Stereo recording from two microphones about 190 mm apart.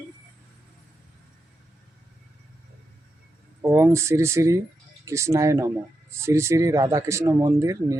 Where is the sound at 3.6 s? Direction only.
15° right (ahead or behind).